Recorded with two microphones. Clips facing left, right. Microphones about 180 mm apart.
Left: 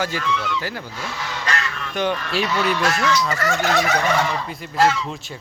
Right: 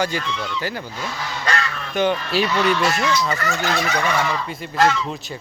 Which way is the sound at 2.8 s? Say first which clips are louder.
Even; 5° right (ahead or behind).